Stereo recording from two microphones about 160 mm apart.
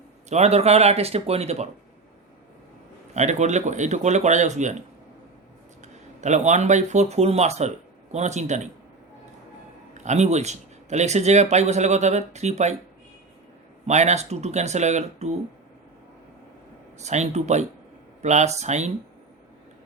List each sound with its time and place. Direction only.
0.3 s speech: 45° right (ahead or behind)
3.2 s speech: 45° right (ahead or behind)
5.8 s speech: 45° right (ahead or behind)
10.0 s speech: 45° right (ahead or behind)
13.8 s speech: 45° right (ahead or behind)
17.0 s speech: 45° right (ahead or behind)